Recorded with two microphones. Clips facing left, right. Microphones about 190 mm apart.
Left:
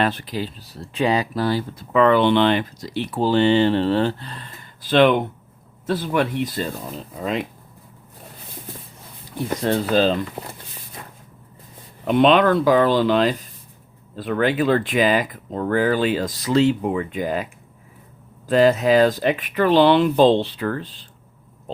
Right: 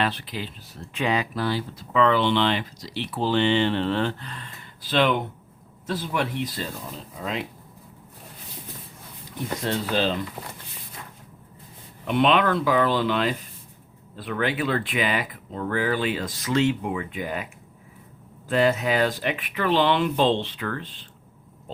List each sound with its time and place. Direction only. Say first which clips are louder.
0.0 s speech: left 5 dB; 45° left (ahead or behind)
4.8 s speech: left 7 dB; 50° left (ahead or behind)
9.8 s speech: left 7 dB; 40° left (ahead or behind)
12.0 s speech: left 5 dB; 35° left (ahead or behind)